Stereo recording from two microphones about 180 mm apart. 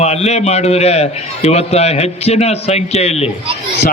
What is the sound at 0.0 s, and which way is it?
A man's voice, 35° left (ahead or behind).